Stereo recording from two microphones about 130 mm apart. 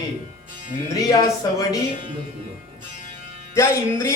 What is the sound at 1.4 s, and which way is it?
Speech, 30° left (ahead or behind).